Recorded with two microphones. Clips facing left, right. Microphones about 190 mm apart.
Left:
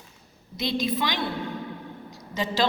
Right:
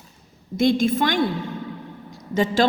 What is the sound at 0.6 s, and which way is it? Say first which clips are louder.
Speech: right 8 dB; 50° right (ahead or behind).